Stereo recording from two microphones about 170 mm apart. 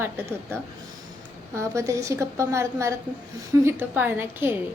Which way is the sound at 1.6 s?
15° right (ahead or behind).